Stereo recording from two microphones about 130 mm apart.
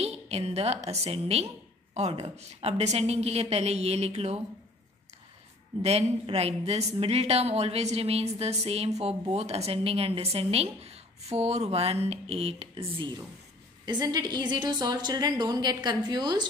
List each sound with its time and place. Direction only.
0.0 s a woman's voice: 50° right (ahead or behind)
5.8 s a woman's voice: 50° right (ahead or behind)
13.8 s a woman's voice: 30° right (ahead or behind)